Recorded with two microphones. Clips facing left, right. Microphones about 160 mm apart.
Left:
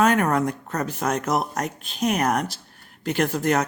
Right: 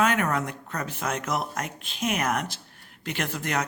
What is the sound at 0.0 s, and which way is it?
Speech, 40° left (ahead or behind).